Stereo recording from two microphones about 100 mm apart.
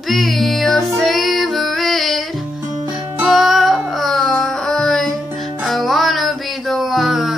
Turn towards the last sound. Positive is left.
turn(degrees=0)  # may be behind; listen again after turning